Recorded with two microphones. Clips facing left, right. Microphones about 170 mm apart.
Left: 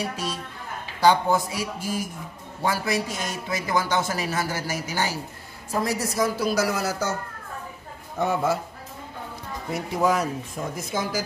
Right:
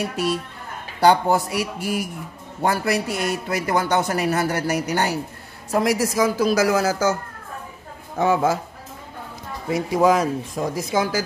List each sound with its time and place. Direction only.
1.0 s a man's voice: 65° right (ahead or behind)
5.7 s speech: 80° right
8.2 s speech: 90° right
9.7 s speech: 90° right